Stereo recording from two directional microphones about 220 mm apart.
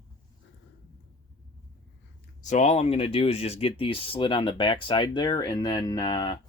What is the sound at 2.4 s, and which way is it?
Speech, 30° left (ahead or behind).